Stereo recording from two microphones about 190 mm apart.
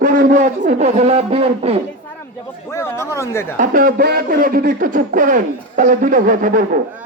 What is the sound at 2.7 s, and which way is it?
Speech, 15° left (ahead or behind).